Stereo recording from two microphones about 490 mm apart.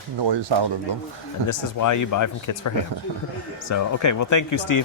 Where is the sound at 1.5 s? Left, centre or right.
Left.